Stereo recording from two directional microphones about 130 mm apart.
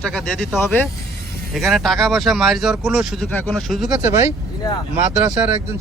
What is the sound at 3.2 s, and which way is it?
Speech, 10° left (ahead or behind).